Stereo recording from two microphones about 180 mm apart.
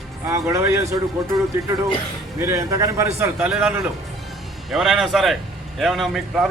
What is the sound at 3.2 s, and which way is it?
Speech, 5° right (ahead or behind).